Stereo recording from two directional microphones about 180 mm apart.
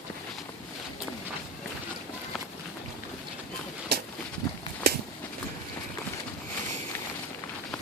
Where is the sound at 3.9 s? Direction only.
60° right (ahead or behind).